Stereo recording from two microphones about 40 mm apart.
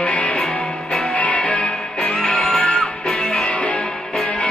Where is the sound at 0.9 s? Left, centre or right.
Left.